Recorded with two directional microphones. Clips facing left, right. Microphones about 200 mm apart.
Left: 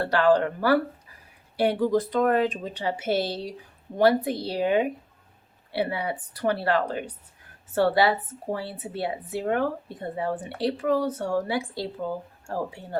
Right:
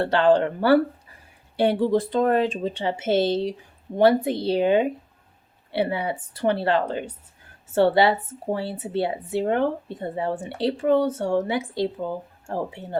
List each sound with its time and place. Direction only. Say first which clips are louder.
0.0 s a woman's voice: right 2 dB; 25° right (ahead or behind)